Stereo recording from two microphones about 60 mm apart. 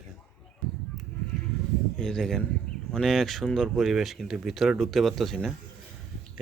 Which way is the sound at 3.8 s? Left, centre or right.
Centre.